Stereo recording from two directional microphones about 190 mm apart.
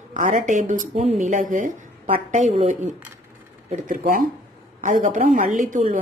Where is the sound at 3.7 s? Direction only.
45° right (ahead or behind).